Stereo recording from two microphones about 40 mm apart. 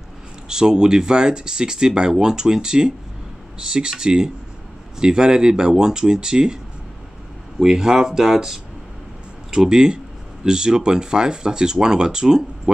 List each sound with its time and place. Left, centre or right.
0.5 s speech: centre
7.6 s speech: centre